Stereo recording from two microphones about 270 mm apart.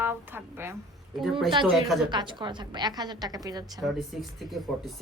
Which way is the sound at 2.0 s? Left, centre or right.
Centre.